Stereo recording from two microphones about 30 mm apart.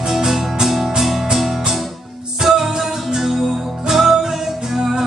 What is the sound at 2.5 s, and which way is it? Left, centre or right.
Music, centre.